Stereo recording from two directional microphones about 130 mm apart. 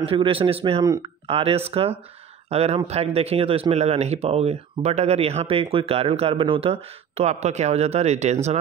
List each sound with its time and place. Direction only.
0.0 s speech: 45° right (ahead or behind)